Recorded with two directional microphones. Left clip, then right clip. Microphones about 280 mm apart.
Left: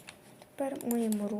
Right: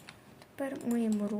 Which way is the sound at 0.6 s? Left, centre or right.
Centre.